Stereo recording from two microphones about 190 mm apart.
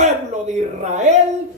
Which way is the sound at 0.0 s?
40° right (ahead or behind).